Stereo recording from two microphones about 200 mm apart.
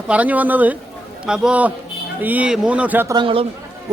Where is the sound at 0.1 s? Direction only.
10° right (ahead or behind).